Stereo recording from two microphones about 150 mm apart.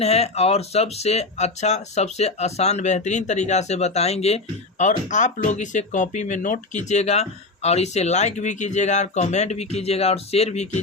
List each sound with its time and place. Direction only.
0.0 s speech: 45° left (ahead or behind)
4.8 s speech: 55° left (ahead or behind)